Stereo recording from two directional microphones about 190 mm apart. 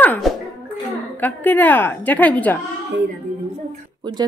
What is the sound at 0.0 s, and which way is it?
Music, 10° left (ahead or behind).